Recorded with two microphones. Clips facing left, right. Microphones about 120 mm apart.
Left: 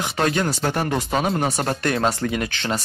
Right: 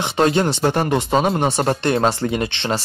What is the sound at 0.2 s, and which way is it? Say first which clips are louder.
Speech: right 5 dB; 25° right (ahead or behind).